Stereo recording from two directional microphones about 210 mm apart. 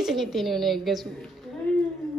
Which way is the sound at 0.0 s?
Centre (ahead or behind).